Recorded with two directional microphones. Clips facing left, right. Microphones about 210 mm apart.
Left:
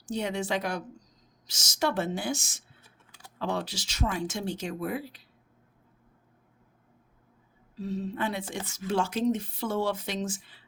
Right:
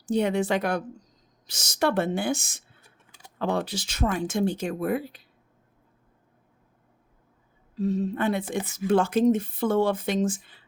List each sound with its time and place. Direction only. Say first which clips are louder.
0.1 s speech: right 6 dB; 55° right (ahead or behind)
2.8 s typing: even; 15° right (ahead or behind)
3.3 s speech: right 5 dB; 55° right (ahead or behind)
7.8 s speech: right 6 dB; 50° right (ahead or behind)